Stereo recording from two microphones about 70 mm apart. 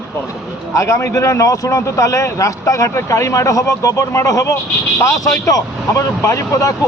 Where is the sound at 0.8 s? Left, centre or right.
Left.